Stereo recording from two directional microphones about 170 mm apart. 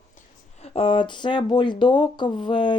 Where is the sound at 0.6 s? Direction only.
35° left (ahead or behind).